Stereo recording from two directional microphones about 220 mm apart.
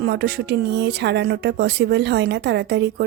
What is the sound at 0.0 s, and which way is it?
Speech, 50° right (ahead or behind).